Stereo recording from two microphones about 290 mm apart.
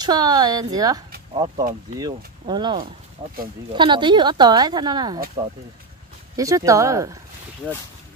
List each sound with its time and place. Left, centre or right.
0.0 s speech: centre
1.6 s speech: right
2.0 s speech: centre
6.3 s speech: centre